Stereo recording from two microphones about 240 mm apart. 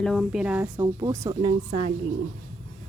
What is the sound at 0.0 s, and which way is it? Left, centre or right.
Speech, centre.